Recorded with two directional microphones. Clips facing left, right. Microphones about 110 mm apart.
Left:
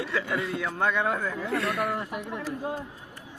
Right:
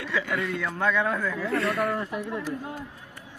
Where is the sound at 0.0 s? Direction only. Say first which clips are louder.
Even; 25° left (ahead or behind).